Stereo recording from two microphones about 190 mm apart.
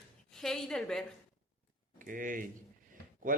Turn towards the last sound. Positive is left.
turn(degrees=-45)  # may be behind; listen again after turning